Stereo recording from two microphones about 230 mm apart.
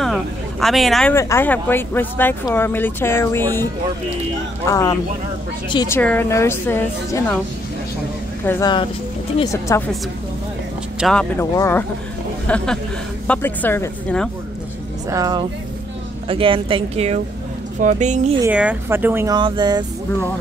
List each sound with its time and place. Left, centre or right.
0.0 s a sound: centre
1.1 s speech: centre
4.6 s speech: centre
8.5 s speech: centre
11.0 s speech: centre
15.0 s speech: centre
18.4 s speech: centre